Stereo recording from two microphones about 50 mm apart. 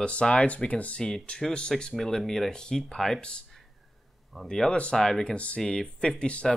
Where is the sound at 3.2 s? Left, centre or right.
Centre.